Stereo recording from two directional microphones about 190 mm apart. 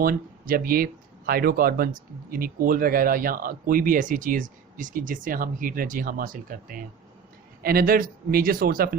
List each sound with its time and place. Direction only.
0.0 s speech: 50° right (ahead or behind)